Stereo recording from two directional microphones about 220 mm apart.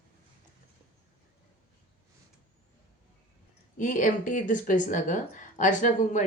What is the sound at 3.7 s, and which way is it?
Speech, 35° left (ahead or behind).